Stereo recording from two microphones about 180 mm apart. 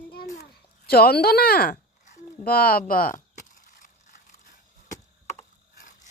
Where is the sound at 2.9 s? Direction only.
50° left (ahead or behind).